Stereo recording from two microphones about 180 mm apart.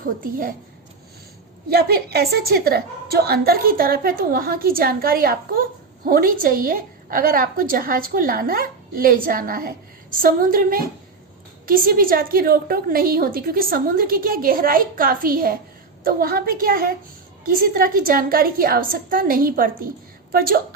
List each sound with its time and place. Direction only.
0.2 s a woman's voice: 50° right (ahead or behind)
1.7 s a woman's voice: 60° right (ahead or behind)